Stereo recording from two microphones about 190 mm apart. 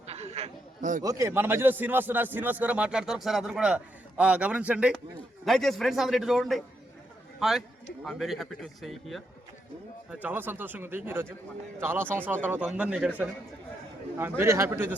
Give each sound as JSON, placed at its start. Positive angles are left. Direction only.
{"t": 0.1, "sound": "a sound", "side_deg": -35}
{"t": 1.0, "sound": "a man's voice", "side_deg": -15}
{"t": 14.2, "sound": "a man's voice", "side_deg": -10}